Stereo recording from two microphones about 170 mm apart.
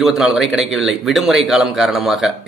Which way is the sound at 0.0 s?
Centre (ahead or behind).